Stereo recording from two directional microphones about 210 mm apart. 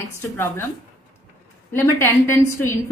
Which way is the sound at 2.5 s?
10° left (ahead or behind).